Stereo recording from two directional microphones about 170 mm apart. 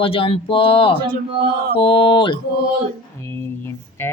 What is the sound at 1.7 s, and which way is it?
Speech, 30° left (ahead or behind).